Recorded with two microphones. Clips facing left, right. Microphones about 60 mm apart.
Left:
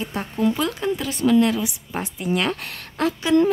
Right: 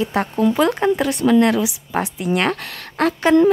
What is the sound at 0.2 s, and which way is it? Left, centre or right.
Speech, right.